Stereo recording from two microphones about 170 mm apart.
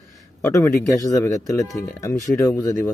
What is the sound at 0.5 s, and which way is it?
Speech, 20° left (ahead or behind).